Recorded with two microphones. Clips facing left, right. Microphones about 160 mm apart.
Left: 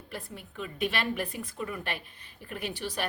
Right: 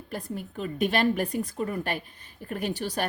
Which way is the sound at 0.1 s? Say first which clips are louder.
Right 7 dB; 40° right (ahead or behind).